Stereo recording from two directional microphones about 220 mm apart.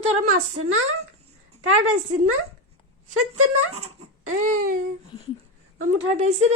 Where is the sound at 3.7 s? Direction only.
30° right (ahead or behind).